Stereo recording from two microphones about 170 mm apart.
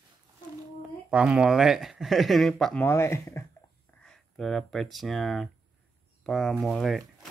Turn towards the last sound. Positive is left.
turn(degrees=0)  # may be behind; listen again after turning